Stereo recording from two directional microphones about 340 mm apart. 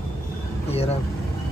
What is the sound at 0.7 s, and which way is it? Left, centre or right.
Vehicle, centre.